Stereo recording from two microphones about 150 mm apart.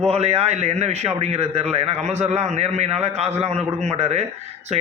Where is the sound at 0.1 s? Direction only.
45° right (ahead or behind).